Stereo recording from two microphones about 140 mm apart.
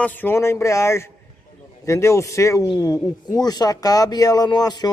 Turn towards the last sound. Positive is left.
turn(degrees=30)  # may be behind; listen again after turning